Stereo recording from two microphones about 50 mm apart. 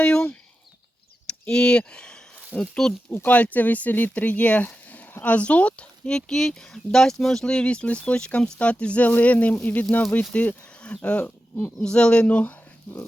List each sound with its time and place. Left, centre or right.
0.0 s speech: centre
1.3 s a sound: centre
2.6 s speech: centre
3.2 s speech: left
4.6 s a sound: left
5.2 s speech: left; by 7.4 s centre
7.4 s speech: left